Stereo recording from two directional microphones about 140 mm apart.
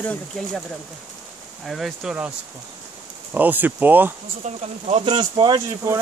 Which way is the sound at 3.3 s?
10° right (ahead or behind).